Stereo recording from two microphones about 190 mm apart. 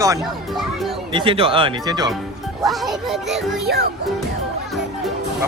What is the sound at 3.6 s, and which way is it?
Speech, 60° right (ahead or behind).